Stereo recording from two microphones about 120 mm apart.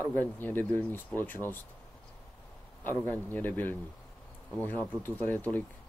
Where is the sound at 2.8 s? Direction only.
15° left (ahead or behind).